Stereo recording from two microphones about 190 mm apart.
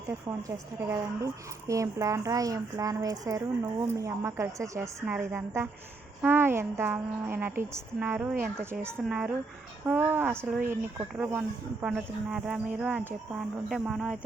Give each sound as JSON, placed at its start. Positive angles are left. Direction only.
{"t": 0.3, "sound": "speech", "side_deg": -15}